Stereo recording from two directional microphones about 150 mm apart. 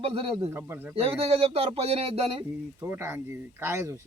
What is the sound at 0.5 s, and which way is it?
Speech, 15° right (ahead or behind).